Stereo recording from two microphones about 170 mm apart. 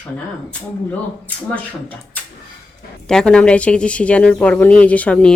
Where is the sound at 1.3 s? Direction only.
10° left (ahead or behind).